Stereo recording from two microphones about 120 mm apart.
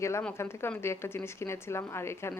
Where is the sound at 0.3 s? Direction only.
20° left (ahead or behind).